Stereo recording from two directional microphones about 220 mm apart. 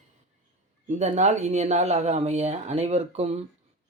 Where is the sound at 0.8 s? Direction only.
30° right (ahead or behind).